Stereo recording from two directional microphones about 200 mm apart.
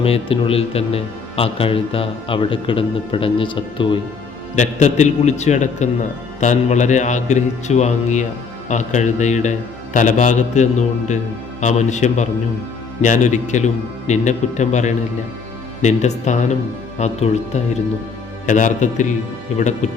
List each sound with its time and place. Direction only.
0.0 s speech: 30° left (ahead or behind)
4.5 s a man's voice: 35° left (ahead or behind)